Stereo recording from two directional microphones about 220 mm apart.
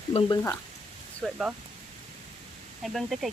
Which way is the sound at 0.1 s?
25° left (ahead or behind).